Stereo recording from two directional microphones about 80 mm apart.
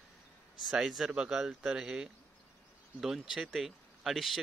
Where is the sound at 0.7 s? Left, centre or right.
Centre.